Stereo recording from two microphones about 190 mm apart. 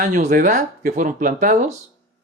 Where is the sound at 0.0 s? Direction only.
45° right (ahead or behind).